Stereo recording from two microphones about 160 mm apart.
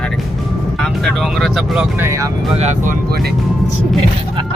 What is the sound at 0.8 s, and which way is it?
Speech, centre (ahead or behind).